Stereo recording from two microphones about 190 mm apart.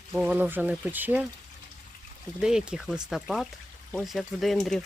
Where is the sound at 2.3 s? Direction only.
5° right (ahead or behind).